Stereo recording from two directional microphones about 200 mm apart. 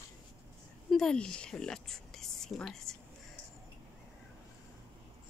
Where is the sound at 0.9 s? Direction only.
Centre (ahead or behind).